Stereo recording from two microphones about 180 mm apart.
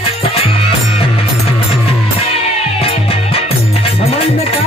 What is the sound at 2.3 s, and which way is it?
Music, 35° left (ahead or behind).